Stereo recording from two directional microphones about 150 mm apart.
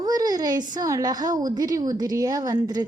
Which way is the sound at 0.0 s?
25° right (ahead or behind).